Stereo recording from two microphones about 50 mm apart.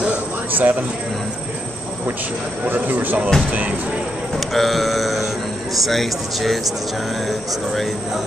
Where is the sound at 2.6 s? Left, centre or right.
Right.